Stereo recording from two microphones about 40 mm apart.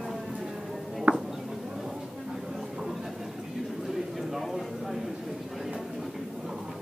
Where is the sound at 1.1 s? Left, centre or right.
Right.